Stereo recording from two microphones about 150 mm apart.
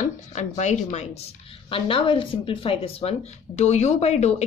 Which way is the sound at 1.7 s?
40° left (ahead or behind).